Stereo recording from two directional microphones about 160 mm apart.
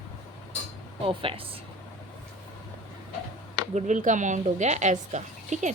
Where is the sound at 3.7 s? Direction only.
50° right (ahead or behind).